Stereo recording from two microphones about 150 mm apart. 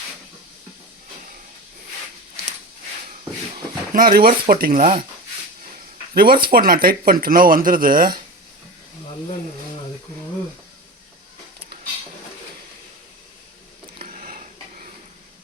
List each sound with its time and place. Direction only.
3.9 s speech: 80° right; by 4.9 s 65° right (ahead or behind)
6.1 s speech: 80° right
14.0 s a sound: 65° right (ahead or behind)